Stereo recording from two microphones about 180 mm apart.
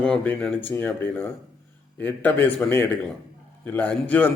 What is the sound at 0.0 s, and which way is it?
A man's voice, 5° left (ahead or behind).